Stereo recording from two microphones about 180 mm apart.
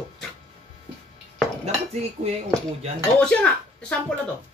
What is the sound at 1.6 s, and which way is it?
Dishes, 35° right (ahead or behind).